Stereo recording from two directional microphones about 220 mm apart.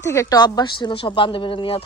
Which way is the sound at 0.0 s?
15° left (ahead or behind).